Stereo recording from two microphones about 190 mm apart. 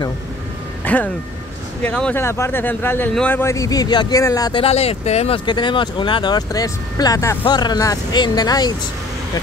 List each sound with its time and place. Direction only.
0.8 s speech: 10° left (ahead or behind)